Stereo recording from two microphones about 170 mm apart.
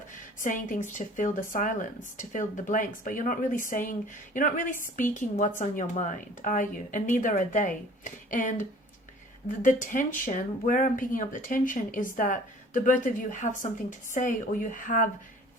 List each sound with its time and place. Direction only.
0.3 s speech: 50° left (ahead or behind)